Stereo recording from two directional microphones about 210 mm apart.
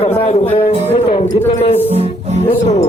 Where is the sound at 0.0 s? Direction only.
30° left (ahead or behind).